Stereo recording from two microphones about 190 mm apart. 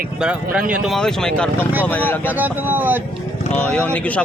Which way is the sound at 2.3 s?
10° right (ahead or behind).